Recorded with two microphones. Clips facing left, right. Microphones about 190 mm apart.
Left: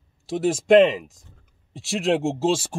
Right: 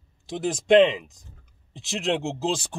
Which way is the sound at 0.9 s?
45° left (ahead or behind).